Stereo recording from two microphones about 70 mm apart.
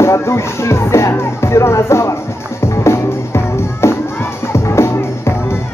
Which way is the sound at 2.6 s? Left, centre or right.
Left.